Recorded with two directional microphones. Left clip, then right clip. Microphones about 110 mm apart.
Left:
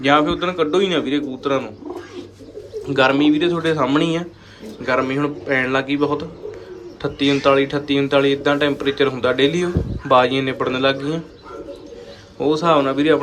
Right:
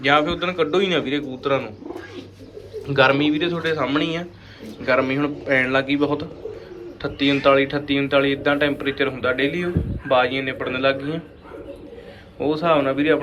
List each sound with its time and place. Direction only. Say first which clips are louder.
0.0 s a man's voice: left 2 dB; 30° left (ahead or behind)
2.8 s a man's voice: left 1 dB; 20° left (ahead or behind)
3.5 s speech: left 4 dB; 35° left (ahead or behind)
4.9 s a man's voice: even; 20° left (ahead or behind)
12.4 s speech: left 3 dB; 30° left (ahead or behind)